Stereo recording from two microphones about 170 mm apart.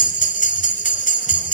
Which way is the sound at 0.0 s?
50° left (ahead or behind).